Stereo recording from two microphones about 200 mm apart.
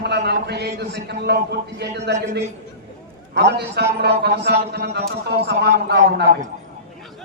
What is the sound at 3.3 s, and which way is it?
A man's voice, 55° right (ahead or behind).